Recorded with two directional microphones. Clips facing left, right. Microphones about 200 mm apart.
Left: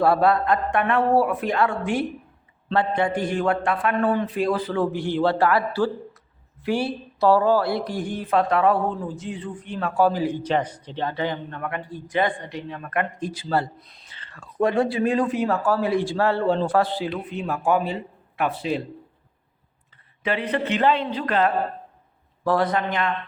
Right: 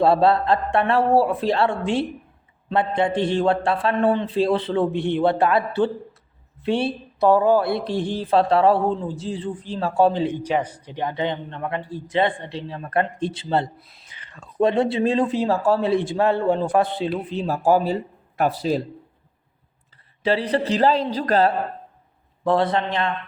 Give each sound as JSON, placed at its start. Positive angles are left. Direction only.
{"t": 0.0, "sound": "speech", "side_deg": -25}
{"t": 10.4, "sound": "speech", "side_deg": -10}
{"t": 13.7, "sound": "speech", "side_deg": -5}
{"t": 14.1, "sound": "speech", "side_deg": -15}
{"t": 20.2, "sound": "a man's voice", "side_deg": -35}
{"t": 22.4, "sound": "speech", "side_deg": -25}